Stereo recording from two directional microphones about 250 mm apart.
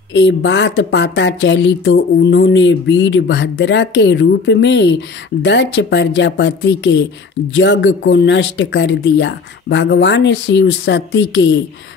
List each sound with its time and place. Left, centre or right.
0.1 s speech: left